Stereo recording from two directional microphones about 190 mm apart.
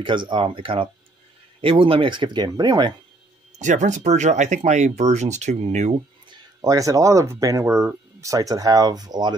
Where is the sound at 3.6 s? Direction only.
40° right (ahead or behind).